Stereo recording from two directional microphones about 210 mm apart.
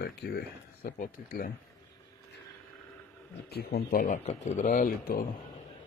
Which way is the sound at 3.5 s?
50° left (ahead or behind).